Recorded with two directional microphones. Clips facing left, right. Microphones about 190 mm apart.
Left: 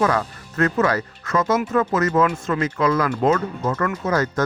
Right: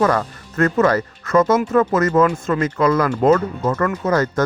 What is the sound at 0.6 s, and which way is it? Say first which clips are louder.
Speech: right 4 dB; 45° right (ahead or behind).